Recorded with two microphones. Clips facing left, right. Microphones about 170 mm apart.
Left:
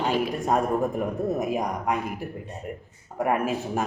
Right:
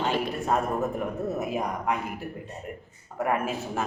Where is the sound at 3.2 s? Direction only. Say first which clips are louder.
Left 3 dB; 15° left (ahead or behind).